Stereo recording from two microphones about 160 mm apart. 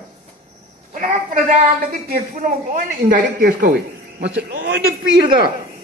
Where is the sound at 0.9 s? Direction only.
55° right (ahead or behind); by 4.8 s 90° right.